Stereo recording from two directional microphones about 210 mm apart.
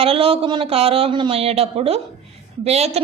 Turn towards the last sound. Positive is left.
turn(degrees=-30)  # may be behind; listen again after turning